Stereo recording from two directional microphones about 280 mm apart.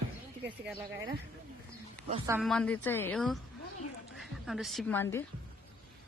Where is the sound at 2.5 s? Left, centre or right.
Centre.